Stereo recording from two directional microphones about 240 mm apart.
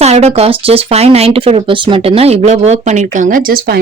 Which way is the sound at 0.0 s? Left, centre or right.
Right.